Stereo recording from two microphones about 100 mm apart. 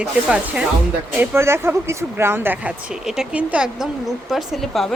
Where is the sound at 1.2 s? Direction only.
25° right (ahead or behind).